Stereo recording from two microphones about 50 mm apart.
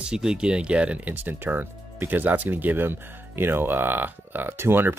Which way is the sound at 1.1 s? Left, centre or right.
Right.